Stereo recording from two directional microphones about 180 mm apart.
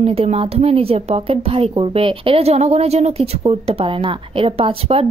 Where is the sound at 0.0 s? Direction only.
35° right (ahead or behind).